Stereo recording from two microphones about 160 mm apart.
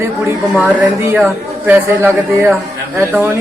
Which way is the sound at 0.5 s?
10° right (ahead or behind).